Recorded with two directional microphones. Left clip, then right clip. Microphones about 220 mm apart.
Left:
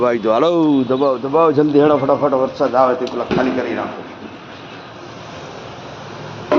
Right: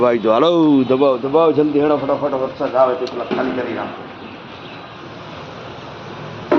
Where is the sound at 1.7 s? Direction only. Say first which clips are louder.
Left 3 dB; 45° left (ahead or behind).